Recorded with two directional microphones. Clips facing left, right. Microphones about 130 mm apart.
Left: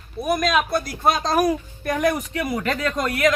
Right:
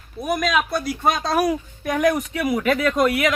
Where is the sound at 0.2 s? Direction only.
Centre (ahead or behind).